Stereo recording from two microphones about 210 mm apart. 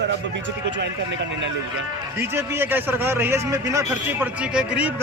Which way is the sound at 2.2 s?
10° right (ahead or behind).